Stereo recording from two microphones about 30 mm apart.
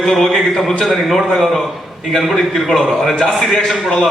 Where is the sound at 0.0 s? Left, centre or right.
Centre.